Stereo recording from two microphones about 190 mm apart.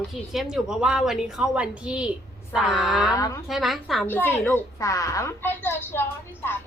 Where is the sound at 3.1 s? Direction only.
15° left (ahead or behind).